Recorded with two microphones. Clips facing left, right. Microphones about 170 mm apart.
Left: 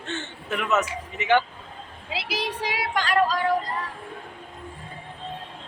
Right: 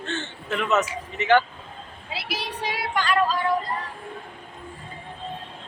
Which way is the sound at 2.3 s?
90° left.